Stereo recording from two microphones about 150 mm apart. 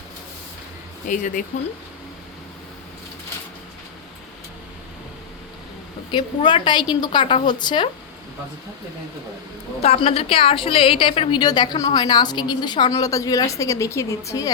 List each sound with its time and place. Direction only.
1.0 s speech: 60° left (ahead or behind)
6.1 s a woman's voice: 30° left (ahead or behind)
9.8 s a woman's voice: 40° left (ahead or behind); by 14.5 s 20° left (ahead or behind)